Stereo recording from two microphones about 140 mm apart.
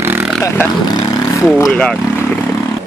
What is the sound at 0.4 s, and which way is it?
Speech, 15° left (ahead or behind).